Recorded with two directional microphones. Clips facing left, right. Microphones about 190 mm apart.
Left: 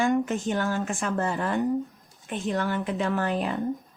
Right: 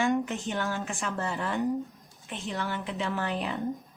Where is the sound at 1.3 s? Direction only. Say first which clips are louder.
Left 3 dB; 50° left (ahead or behind).